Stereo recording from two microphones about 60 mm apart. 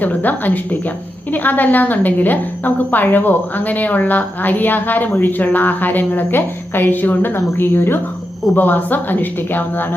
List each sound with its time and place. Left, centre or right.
0.0 s a woman's voice: left